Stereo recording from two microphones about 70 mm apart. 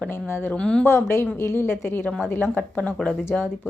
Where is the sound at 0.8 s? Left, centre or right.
Left.